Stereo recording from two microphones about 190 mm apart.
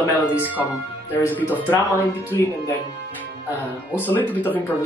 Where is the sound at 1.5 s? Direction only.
10° left (ahead or behind).